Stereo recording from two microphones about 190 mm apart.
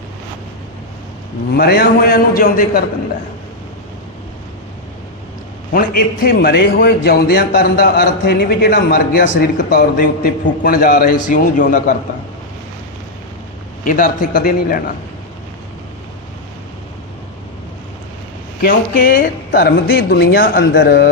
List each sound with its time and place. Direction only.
1.5 s a man's voice: 55° left (ahead or behind)
6.2 s a man's voice: 55° left (ahead or behind)
13.8 s a man's voice: 45° left (ahead or behind)
18.6 s a man's voice: 50° left (ahead or behind)